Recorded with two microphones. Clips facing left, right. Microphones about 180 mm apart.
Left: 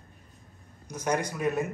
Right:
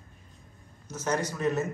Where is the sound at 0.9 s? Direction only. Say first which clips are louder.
Left 1 dB; 15° left (ahead or behind).